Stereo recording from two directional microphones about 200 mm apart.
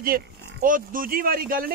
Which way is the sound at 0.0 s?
45° right (ahead or behind).